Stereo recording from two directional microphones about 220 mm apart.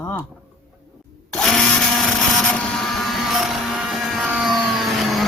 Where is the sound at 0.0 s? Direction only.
10° left (ahead or behind).